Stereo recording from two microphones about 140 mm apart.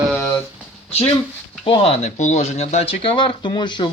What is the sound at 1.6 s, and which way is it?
Speech, 40° left (ahead or behind).